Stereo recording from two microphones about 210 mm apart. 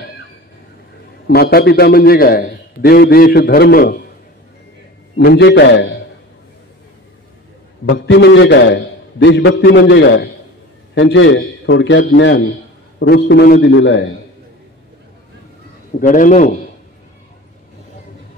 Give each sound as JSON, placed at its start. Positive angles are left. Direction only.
{"t": 1.2, "sound": "a man's voice", "side_deg": 50}
{"t": 5.1, "sound": "a man's voice", "side_deg": 55}
{"t": 7.9, "sound": "a man's voice", "side_deg": 55}
{"t": 13.0, "sound": "a man's voice", "side_deg": 50}
{"t": 16.0, "sound": "a man's voice", "side_deg": 35}